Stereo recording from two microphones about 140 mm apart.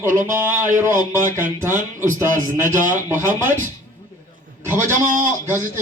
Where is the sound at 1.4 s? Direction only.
15° right (ahead or behind).